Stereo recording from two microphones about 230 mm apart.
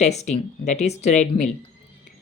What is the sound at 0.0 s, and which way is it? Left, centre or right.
Speech, left.